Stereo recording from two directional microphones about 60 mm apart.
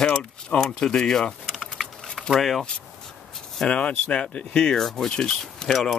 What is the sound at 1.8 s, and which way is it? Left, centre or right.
Typing, centre.